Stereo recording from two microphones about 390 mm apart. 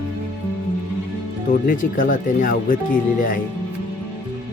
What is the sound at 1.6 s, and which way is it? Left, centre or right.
Speech, left.